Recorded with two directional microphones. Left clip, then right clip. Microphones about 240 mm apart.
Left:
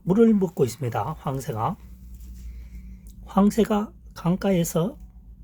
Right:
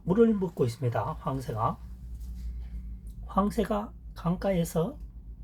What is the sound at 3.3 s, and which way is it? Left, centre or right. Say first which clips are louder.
Speech: left 6 dB; left.